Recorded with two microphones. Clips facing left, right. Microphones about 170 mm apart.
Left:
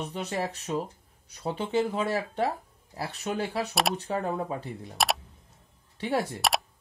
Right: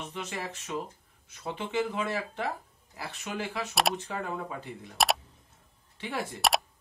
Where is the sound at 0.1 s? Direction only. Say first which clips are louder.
Left 5 dB; 35° left (ahead or behind).